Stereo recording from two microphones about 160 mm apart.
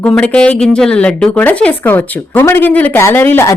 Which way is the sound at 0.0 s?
5° left (ahead or behind).